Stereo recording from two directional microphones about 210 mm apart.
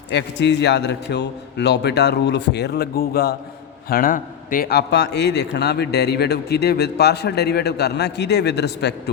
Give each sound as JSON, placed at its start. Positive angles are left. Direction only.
{"t": 0.1, "sound": "a man's voice", "side_deg": 55}